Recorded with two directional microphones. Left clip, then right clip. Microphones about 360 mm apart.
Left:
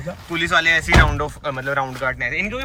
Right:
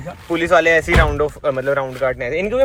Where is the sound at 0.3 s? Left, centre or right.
Centre.